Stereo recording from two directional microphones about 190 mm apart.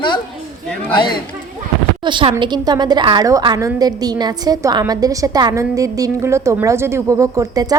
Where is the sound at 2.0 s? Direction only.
25° right (ahead or behind).